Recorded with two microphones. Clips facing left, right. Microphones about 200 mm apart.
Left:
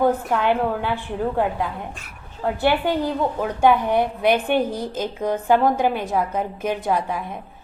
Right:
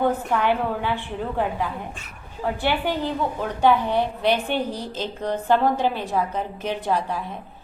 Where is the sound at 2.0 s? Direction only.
10° left (ahead or behind).